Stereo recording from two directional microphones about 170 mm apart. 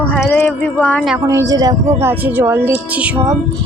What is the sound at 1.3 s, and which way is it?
Speech, 20° right (ahead or behind).